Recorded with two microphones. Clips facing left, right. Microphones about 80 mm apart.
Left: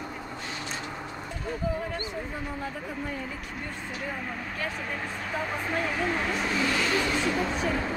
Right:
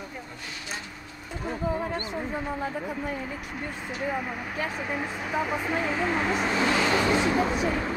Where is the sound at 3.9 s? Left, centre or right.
Centre.